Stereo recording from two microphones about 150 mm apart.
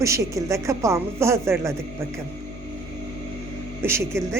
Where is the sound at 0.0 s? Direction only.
20° right (ahead or behind).